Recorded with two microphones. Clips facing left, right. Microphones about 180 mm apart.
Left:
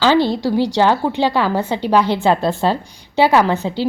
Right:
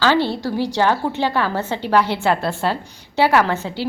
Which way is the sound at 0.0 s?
15° left (ahead or behind).